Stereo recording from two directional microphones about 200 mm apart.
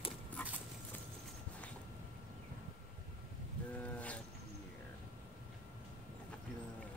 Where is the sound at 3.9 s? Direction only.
5° left (ahead or behind).